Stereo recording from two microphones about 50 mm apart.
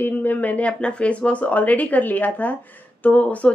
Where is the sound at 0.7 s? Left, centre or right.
Left.